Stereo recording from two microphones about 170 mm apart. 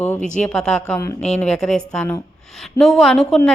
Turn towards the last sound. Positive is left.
turn(degrees=5)  # may be behind; listen again after turning